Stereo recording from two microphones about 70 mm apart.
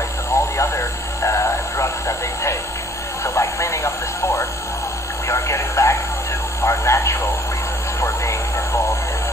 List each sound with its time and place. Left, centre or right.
0.3 s radio: left